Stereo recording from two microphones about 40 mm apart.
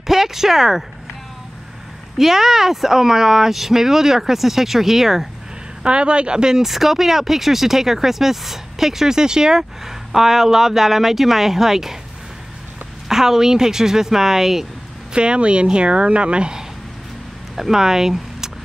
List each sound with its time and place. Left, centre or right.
0.0 s speech: centre
2.1 s speech: centre
5.9 s a woman's voice: right; by 12.0 s centre
13.1 s speech: centre
15.1 s a woman's voice: right
17.6 s speech: centre